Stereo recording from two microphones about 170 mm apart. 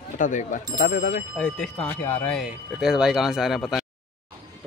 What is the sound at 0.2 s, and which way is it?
Speech, 50° left (ahead or behind).